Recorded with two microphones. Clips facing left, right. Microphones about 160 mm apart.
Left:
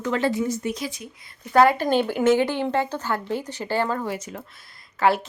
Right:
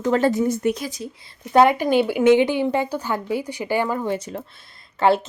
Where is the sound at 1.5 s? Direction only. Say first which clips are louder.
Right 2 dB; 20° right (ahead or behind).